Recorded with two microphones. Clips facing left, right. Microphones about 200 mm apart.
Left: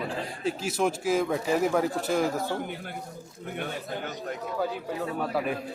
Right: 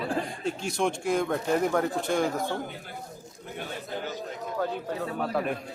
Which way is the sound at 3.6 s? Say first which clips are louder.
Left 1 dB; 60° left (ahead or behind).